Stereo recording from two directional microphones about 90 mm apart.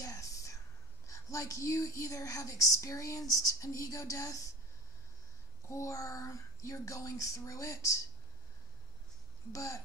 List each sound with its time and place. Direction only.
0.0 s whispering: 40° left (ahead or behind)
1.0 s a woman's voice: 35° left (ahead or behind)
5.7 s a woman's voice: 35° left (ahead or behind)
9.5 s a woman's voice: 35° left (ahead or behind)